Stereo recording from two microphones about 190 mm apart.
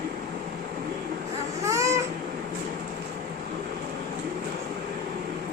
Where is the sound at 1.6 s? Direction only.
15° right (ahead or behind).